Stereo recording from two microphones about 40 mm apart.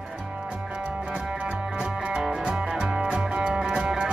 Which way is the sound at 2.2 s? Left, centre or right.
Centre.